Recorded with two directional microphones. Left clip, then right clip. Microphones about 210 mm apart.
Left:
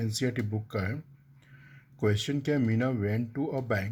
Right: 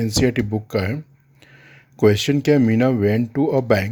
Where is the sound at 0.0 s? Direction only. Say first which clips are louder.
Right 13 dB; 35° right (ahead or behind).